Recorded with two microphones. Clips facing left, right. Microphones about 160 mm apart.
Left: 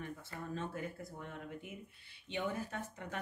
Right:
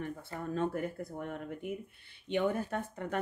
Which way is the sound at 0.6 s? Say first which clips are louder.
Right 10 dB; 55° right (ahead or behind).